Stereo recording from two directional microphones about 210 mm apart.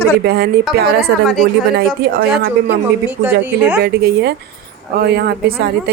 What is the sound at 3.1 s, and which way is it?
Speech, 10° right (ahead or behind).